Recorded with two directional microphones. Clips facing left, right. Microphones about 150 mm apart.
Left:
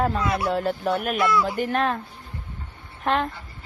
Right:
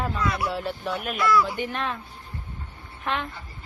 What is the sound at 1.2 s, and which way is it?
Speech, 25° left (ahead or behind).